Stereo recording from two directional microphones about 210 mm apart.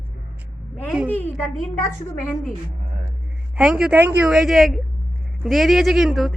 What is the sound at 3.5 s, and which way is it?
A woman's voice, 5° right (ahead or behind).